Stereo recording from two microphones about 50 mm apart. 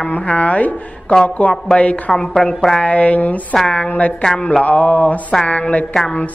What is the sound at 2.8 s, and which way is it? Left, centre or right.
Speech, left.